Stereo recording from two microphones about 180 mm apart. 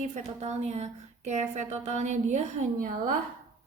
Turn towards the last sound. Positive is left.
turn(degrees=-45)  # may be behind; listen again after turning